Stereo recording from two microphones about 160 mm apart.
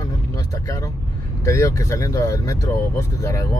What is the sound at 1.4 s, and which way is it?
Speech, 20° left (ahead or behind).